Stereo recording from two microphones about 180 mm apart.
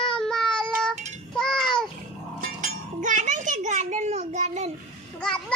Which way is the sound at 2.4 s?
45° right (ahead or behind).